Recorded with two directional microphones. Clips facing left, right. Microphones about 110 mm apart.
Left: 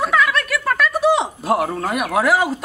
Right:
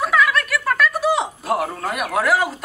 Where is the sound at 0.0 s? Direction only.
Centre (ahead or behind).